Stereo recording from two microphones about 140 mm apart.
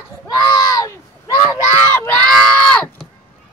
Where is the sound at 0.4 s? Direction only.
25° left (ahead or behind).